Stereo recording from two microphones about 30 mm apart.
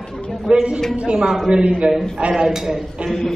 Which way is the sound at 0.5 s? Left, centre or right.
Right.